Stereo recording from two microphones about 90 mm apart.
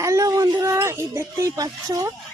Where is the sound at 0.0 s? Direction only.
35° right (ahead or behind).